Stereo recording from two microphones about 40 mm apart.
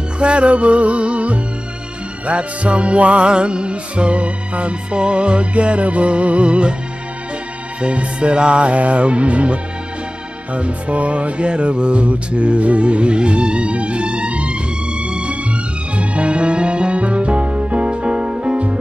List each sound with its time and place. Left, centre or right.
0.2 s music: right
7.8 s music: right